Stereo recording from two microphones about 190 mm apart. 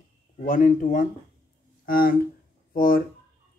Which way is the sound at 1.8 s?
50° left (ahead or behind).